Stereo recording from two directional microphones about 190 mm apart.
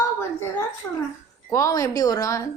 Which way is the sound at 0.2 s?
15° left (ahead or behind).